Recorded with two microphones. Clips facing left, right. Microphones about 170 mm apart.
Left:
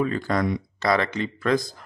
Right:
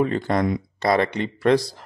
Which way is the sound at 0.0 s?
25° right (ahead or behind).